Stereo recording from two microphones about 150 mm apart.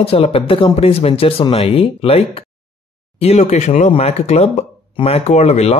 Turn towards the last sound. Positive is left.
turn(degrees=45)  # may be behind; listen again after turning